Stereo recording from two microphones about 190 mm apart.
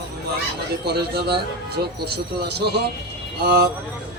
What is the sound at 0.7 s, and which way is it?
A man's voice, 55° right (ahead or behind).